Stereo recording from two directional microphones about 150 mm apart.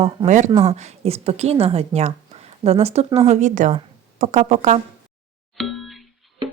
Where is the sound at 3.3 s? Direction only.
55° right (ahead or behind).